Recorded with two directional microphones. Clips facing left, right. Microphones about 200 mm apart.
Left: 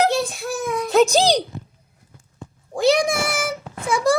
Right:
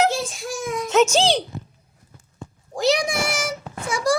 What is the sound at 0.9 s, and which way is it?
Speech, 35° left (ahead or behind).